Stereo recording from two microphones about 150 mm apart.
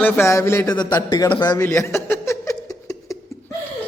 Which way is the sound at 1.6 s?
15° left (ahead or behind).